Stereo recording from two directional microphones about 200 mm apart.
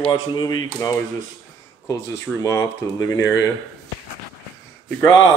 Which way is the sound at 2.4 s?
15° left (ahead or behind).